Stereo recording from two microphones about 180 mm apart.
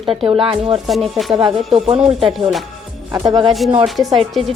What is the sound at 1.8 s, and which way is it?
Speech, 35° right (ahead or behind).